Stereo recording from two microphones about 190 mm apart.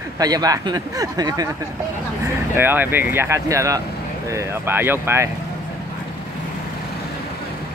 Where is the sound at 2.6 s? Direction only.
10° right (ahead or behind).